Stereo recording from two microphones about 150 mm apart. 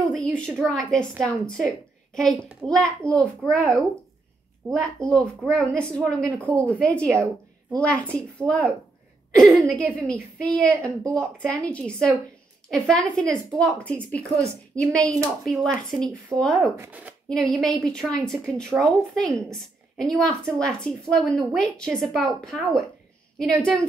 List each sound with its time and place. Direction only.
0.1 s a woman's voice: 5° left (ahead or behind)
2.1 s a woman's voice: 5° left (ahead or behind)
15.0 s speech: 20° right (ahead or behind)
15.4 s a woman's voice: 5° left (ahead or behind)
16.7 s speech: 15° right (ahead or behind)
17.3 s a woman's voice: 5° left (ahead or behind)